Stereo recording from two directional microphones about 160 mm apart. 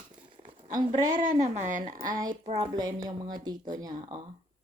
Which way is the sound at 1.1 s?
55° right (ahead or behind).